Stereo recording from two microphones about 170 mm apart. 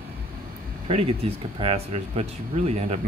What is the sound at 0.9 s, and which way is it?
Speech, 35° right (ahead or behind).